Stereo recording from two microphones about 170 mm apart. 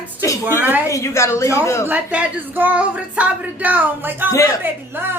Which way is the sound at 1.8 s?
10° right (ahead or behind).